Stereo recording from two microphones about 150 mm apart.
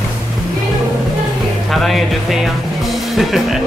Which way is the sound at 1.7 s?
Centre (ahead or behind).